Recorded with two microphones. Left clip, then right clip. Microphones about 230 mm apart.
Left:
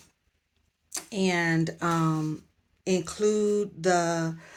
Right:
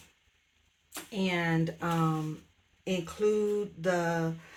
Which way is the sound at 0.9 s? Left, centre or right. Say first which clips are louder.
Left 5 dB; left.